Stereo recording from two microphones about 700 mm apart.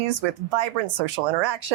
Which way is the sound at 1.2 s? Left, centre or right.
Right.